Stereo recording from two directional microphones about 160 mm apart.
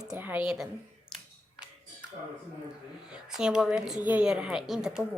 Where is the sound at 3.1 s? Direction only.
5° right (ahead or behind).